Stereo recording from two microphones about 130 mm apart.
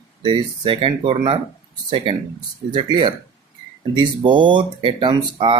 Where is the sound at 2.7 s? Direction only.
35° right (ahead or behind).